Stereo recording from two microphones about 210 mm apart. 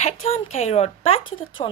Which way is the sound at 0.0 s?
30° left (ahead or behind).